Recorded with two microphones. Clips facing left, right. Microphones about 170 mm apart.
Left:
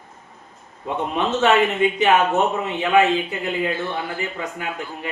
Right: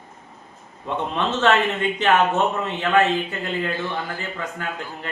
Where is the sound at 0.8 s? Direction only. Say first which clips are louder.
Left 2 dB; 10° left (ahead or behind).